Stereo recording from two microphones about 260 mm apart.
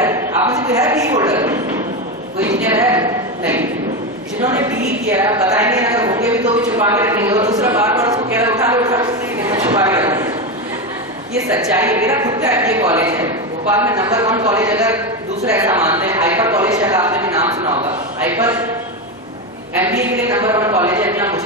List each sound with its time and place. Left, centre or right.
0.0 s a man's voice: centre
6.8 s a sound: centre
11.5 s a man's voice: centre
17.6 s a man's voice: right
18.2 s a man's voice: centre
19.8 s a man's voice: centre